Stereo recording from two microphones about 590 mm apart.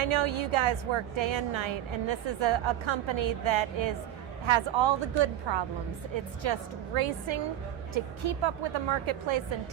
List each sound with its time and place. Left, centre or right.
0.0 s a woman's voice: right